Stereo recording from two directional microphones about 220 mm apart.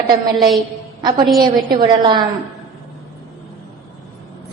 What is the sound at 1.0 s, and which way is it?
A woman's voice, 20° right (ahead or behind).